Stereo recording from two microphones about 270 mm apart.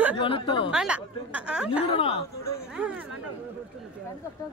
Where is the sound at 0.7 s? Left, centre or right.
Centre.